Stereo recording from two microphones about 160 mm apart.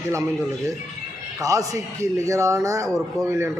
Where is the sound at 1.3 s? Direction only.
20° right (ahead or behind).